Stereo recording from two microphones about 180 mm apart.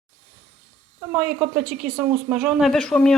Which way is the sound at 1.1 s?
10° right (ahead or behind).